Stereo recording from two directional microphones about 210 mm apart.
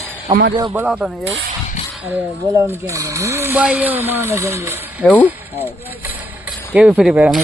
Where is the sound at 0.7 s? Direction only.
5° right (ahead or behind).